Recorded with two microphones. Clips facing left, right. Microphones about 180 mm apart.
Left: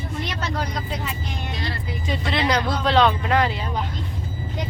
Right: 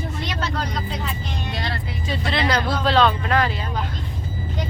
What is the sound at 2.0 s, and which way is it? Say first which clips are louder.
Speech: even; 15° left (ahead or behind).